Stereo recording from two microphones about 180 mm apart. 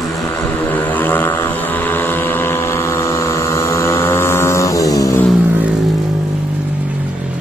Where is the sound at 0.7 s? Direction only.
10° left (ahead or behind).